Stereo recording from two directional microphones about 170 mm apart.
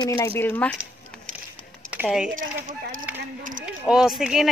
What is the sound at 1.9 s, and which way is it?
Speech, 5° right (ahead or behind).